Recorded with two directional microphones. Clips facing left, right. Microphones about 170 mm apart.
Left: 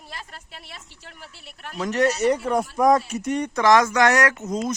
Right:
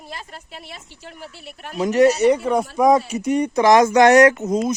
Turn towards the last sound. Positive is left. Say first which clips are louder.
# right 6 dB
turn(degrees=-10)  # may be behind; listen again after turning